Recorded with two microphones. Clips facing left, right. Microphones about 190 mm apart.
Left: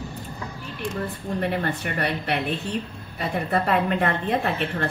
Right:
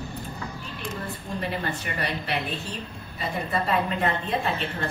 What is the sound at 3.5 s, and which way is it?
A woman's voice, 60° left (ahead or behind).